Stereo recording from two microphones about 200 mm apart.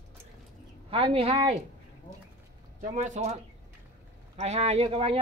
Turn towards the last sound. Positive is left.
turn(degrees=-30)  # may be behind; listen again after turning